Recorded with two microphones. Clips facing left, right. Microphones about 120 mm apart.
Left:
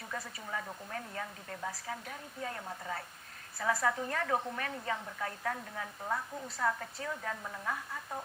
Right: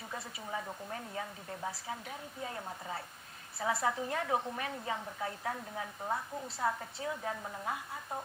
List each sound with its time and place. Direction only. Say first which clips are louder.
0.1 s a woman's voice: even; 20° right (ahead or behind)